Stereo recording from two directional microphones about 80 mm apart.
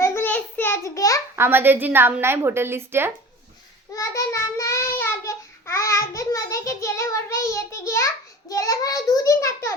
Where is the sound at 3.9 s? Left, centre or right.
Left.